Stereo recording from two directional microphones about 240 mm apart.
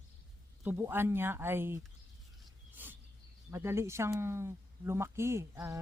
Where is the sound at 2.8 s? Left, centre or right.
Centre.